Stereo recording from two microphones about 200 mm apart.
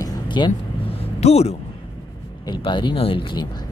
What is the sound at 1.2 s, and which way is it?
Speech, 35° left (ahead or behind).